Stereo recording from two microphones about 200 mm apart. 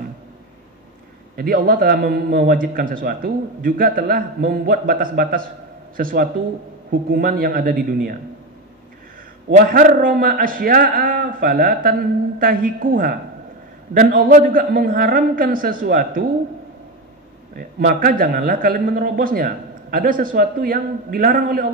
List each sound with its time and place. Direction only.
1.3 s a man's voice: 45° right (ahead or behind)
9.6 s a man's voice: 45° right (ahead or behind)
17.6 s a man's voice: 45° right (ahead or behind)